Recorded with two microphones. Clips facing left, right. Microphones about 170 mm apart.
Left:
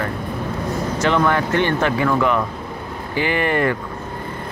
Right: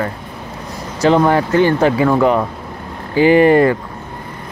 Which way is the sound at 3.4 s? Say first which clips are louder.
Right 9 dB; 30° right (ahead or behind).